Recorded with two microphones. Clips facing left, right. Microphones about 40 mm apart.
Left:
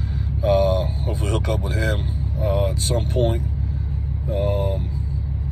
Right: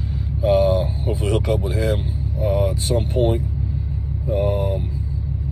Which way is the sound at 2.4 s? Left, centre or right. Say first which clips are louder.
Right 2 dB; left.